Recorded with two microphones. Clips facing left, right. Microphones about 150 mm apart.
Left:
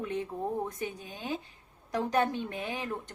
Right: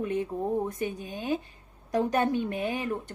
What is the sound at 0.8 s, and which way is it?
Speech, 15° right (ahead or behind).